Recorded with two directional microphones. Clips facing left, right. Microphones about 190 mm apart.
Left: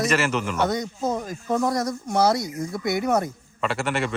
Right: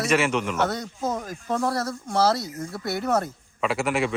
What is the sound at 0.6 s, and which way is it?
Speech, 10° left (ahead or behind).